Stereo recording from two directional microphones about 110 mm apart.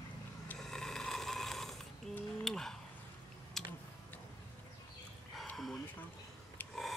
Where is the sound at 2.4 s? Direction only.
5° left (ahead or behind).